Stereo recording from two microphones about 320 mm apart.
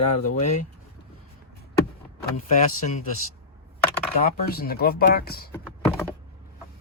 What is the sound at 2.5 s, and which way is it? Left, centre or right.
Speech, left.